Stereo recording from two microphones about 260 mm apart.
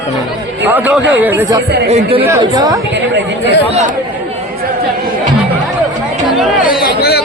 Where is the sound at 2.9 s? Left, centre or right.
Right.